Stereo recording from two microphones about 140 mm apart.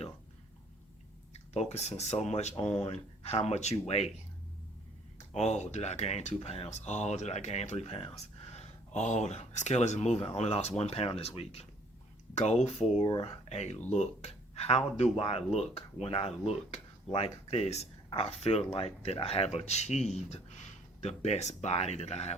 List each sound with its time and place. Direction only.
1.5 s speech: 50° left (ahead or behind)
5.1 s speech: 55° left (ahead or behind)
9.0 s speech: 55° left (ahead or behind)